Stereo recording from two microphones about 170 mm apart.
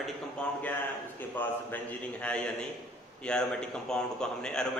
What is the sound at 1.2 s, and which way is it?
A man's voice, 10° left (ahead or behind).